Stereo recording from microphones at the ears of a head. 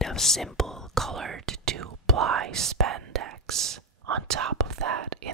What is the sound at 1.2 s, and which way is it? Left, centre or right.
Speech, right.